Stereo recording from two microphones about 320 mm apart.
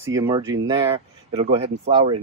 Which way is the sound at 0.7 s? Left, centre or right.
Centre.